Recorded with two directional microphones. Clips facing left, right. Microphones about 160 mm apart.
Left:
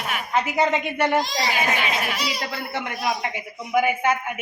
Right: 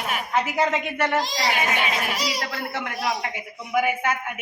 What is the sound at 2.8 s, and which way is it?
A woman's voice, centre (ahead or behind).